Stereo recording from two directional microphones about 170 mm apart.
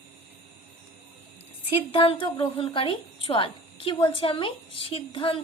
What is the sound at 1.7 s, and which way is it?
A woman's voice, 30° left (ahead or behind).